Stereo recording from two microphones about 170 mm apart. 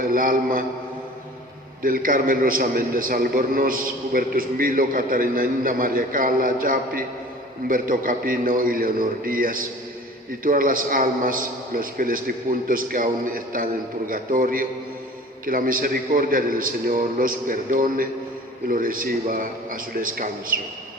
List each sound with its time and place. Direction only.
0.0 s a man's voice: 55° right (ahead or behind)
1.8 s a man's voice: 55° right (ahead or behind)